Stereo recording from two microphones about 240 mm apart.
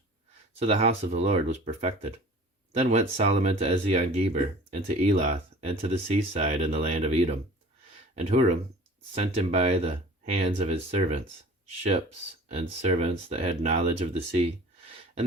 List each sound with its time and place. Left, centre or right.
0.6 s speech: right
12.5 s speech: right